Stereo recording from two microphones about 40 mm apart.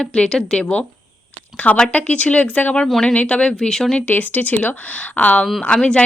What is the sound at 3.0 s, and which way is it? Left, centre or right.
Speech, left.